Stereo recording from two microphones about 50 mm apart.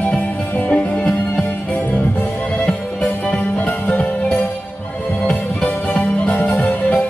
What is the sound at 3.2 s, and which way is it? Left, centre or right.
Music, left.